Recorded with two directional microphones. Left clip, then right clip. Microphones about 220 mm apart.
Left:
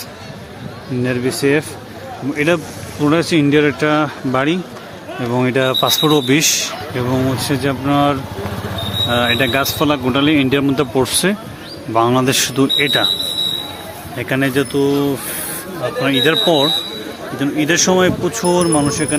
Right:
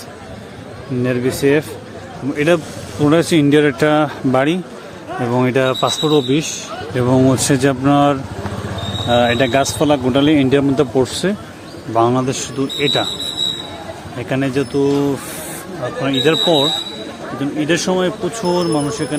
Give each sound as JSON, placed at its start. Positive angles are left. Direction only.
{"t": 1.0, "sound": "speech", "side_deg": 0}
{"t": 5.3, "sound": "speech", "side_deg": 0}
{"t": 6.9, "sound": "speech", "side_deg": -20}
{"t": 14.2, "sound": "speech", "side_deg": 0}
{"t": 16.2, "sound": "speech", "side_deg": 5}